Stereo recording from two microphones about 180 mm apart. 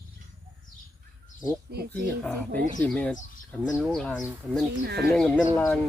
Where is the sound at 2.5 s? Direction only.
50° right (ahead or behind).